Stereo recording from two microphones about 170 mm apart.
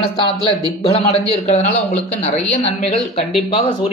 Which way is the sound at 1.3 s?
40° left (ahead or behind).